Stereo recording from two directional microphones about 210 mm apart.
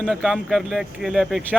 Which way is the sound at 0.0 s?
Centre (ahead or behind).